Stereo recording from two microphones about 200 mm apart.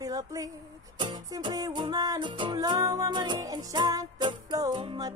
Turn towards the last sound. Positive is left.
turn(degrees=-20)  # may be behind; listen again after turning